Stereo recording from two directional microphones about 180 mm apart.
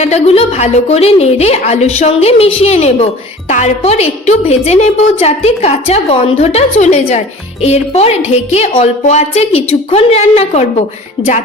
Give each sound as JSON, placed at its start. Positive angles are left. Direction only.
{"t": 0.0, "sound": "a woman's voice", "side_deg": 35}
{"t": 11.2, "sound": "speech", "side_deg": 25}